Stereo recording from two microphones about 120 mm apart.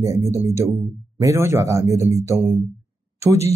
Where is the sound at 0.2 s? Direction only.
25° right (ahead or behind).